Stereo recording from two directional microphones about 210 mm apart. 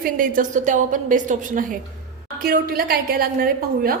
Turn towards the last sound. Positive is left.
turn(degrees=-45)  # may be behind; listen again after turning